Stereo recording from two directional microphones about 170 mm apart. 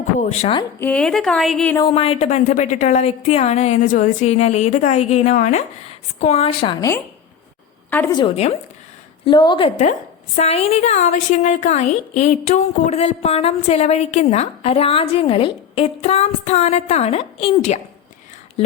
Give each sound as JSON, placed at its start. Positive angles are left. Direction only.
{"t": 0.2, "sound": "a woman's voice", "side_deg": 40}
{"t": 0.8, "sound": "a woman's voice", "side_deg": 10}
{"t": 1.9, "sound": "a woman's voice", "side_deg": 35}
{"t": 7.9, "sound": "a woman's voice", "side_deg": 10}
{"t": 8.1, "sound": "a woman's voice", "side_deg": 25}